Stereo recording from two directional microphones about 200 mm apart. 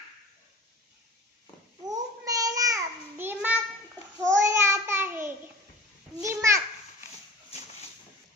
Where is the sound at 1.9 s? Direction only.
15° right (ahead or behind).